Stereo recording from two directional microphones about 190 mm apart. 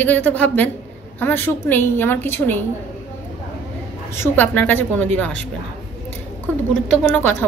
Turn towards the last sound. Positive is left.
turn(degrees=10)  # may be behind; listen again after turning